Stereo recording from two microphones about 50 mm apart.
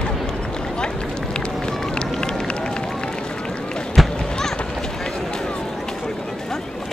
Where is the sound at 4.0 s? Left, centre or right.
Centre.